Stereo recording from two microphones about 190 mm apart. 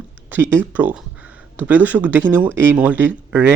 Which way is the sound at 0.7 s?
5° right (ahead or behind).